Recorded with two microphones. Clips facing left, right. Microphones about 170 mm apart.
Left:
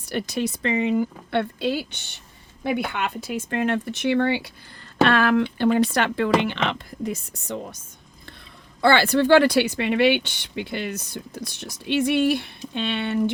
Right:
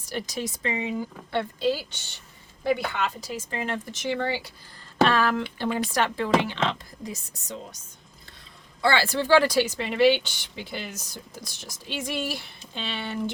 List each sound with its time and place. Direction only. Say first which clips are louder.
0.0 s speech: left 6 dB; 65° left (ahead or behind)
8.8 s speech: left 6 dB; 60° left (ahead or behind)